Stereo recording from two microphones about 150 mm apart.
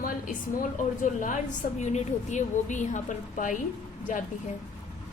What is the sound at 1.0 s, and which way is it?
A woman's voice, 60° left (ahead or behind).